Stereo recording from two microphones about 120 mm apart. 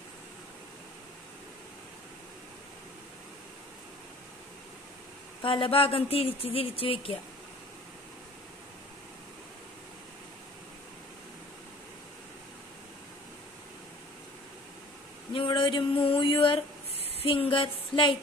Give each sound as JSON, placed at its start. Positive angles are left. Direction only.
{"t": 5.4, "sound": "speech", "side_deg": 50}
{"t": 15.3, "sound": "speech", "side_deg": 45}